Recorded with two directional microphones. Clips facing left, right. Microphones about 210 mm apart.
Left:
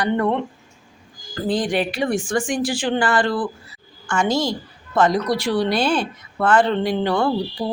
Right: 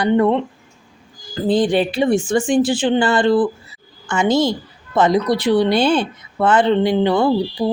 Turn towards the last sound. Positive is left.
turn(degrees=-25)  # may be behind; listen again after turning